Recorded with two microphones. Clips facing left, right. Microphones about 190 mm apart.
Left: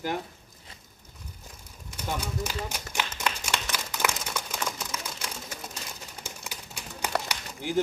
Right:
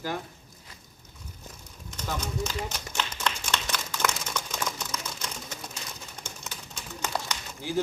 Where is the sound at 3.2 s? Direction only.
10° left (ahead or behind).